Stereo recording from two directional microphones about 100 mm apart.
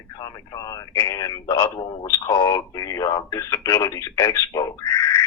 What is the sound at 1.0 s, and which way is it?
Speech, 35° left (ahead or behind).